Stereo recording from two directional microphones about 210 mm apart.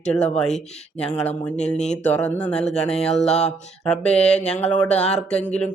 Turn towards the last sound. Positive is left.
turn(degrees=5)  # may be behind; listen again after turning